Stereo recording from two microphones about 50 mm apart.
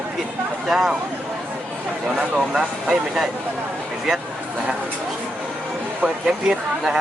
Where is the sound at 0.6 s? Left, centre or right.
Centre.